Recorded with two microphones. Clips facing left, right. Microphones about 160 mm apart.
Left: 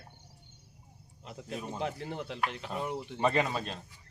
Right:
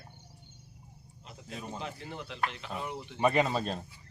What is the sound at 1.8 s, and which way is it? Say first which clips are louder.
Speech: left 5 dB; 50° left (ahead or behind).